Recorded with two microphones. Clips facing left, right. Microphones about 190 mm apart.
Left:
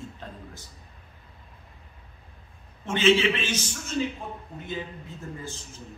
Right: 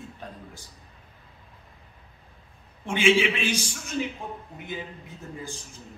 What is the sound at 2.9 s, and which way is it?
Speech, 10° right (ahead or behind).